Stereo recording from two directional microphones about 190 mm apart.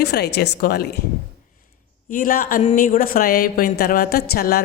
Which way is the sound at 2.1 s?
50° left (ahead or behind).